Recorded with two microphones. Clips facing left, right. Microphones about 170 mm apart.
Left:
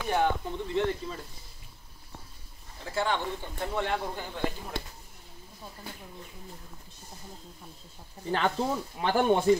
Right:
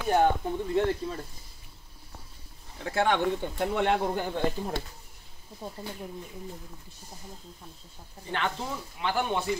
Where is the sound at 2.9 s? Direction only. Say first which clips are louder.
Right 4 dB; 65° right (ahead or behind).